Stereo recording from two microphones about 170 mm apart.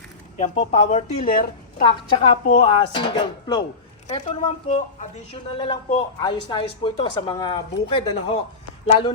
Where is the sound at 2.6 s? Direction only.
30° left (ahead or behind).